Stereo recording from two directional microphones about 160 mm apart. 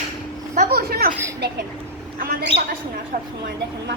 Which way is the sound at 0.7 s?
70° right (ahead or behind).